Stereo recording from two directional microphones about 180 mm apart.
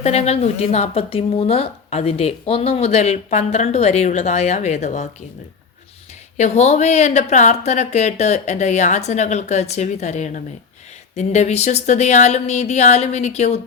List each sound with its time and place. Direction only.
0.0 s speech: 35° left (ahead or behind)
6.3 s speech: 40° left (ahead or behind)